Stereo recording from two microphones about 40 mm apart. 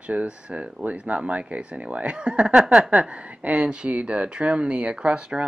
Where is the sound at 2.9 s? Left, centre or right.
Right.